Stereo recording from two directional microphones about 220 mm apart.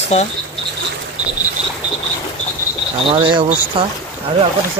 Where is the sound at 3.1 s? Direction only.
20° right (ahead or behind).